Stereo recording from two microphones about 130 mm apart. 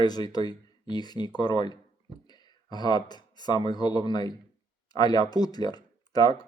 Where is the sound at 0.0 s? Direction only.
30° left (ahead or behind).